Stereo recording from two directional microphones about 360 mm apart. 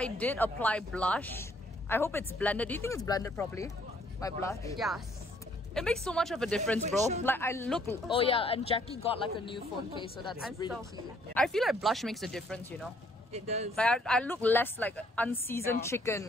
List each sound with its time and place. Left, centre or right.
0.0 s a woman's voice: centre
6.8 s speech: centre
7.2 s speech: centre
11.3 s a woman's voice: centre
13.3 s speech: centre
13.7 s a woman's voice: centre